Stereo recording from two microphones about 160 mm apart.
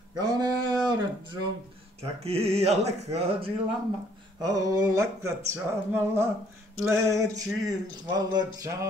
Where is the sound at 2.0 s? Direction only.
40° right (ahead or behind).